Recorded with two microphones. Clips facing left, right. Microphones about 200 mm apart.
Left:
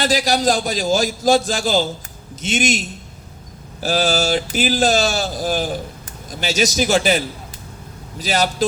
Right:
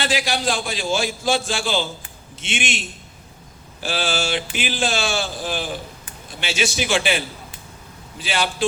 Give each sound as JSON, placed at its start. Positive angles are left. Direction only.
{"t": 0.0, "sound": "speech", "side_deg": 40}